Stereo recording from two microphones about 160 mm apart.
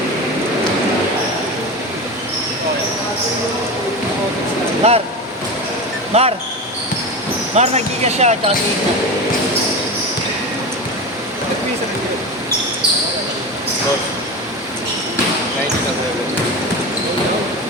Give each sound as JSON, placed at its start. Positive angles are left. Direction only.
{"t": 4.8, "sound": "speech", "side_deg": -40}
{"t": 6.1, "sound": "speech", "side_deg": -40}
{"t": 7.5, "sound": "speech", "side_deg": -45}